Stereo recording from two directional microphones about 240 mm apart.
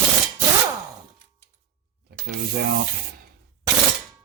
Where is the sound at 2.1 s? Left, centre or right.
Right.